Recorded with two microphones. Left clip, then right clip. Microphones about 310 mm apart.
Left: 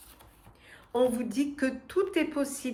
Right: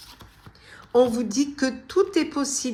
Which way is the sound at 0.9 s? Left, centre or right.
Centre.